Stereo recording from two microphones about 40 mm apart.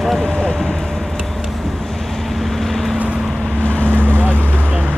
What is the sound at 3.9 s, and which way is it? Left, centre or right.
Boat, right.